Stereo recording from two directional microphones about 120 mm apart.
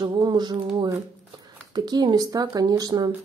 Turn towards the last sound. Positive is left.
turn(degrees=-35)  # may be behind; listen again after turning